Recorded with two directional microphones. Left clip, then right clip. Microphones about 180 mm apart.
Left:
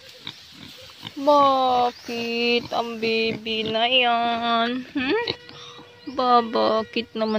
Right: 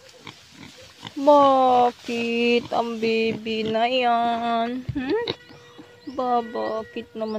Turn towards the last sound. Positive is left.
turn(degrees=10)  # may be behind; listen again after turning